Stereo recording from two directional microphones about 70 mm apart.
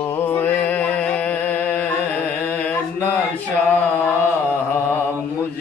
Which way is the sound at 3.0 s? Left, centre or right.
Left.